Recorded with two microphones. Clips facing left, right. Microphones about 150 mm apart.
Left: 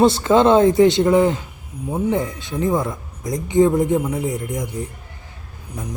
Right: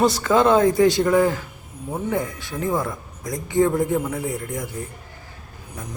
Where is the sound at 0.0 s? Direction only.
25° left (ahead or behind).